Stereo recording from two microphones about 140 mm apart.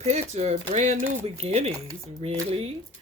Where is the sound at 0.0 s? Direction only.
50° right (ahead or behind).